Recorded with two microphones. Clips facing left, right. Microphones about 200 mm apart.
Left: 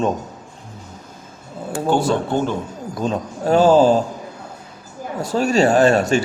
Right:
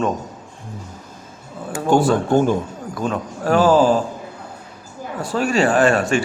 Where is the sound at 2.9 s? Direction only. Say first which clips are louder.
Left 1 dB; 25° left (ahead or behind).